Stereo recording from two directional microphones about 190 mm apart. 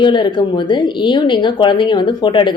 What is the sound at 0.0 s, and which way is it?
A woman's voice, 25° left (ahead or behind).